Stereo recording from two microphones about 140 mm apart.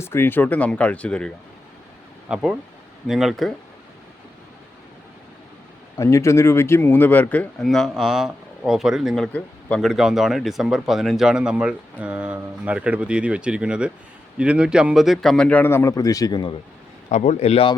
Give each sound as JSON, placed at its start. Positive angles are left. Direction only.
{"t": 0.0, "sound": "speech", "side_deg": 15}
{"t": 2.3, "sound": "speech", "side_deg": -5}
{"t": 6.0, "sound": "speech", "side_deg": 20}
{"t": 17.1, "sound": "a man's voice", "side_deg": 55}